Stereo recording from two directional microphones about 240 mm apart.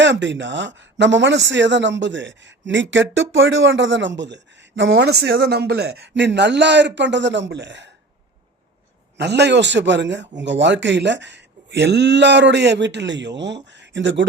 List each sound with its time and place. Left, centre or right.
0.0 s speech: right
9.1 s speech: right